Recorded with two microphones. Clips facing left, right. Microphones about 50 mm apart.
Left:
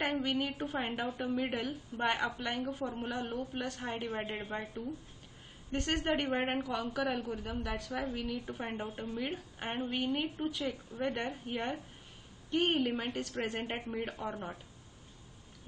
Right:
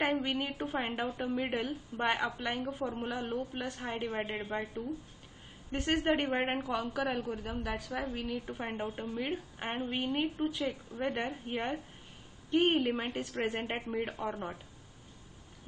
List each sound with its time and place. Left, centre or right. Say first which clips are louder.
0.2 s a woman's voice: even; centre
5.7 s a woman's voice: right 2 dB; centre
9.8 s a woman's voice: right 1 dB; centre